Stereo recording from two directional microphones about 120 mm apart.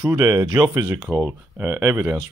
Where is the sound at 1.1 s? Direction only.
10° left (ahead or behind).